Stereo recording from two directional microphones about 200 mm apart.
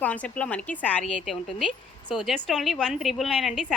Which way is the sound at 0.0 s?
5° left (ahead or behind).